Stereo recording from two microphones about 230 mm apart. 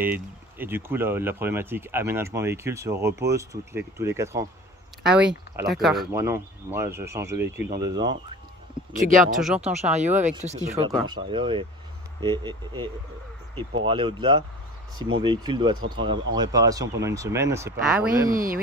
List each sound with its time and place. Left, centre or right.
0.0 s speech: centre
6.1 s speech: centre
9.0 s speech: right; by 18.3 s centre
18.3 s speech: right